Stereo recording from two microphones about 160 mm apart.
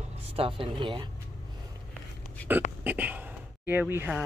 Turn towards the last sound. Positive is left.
turn(degrees=-10)  # may be behind; listen again after turning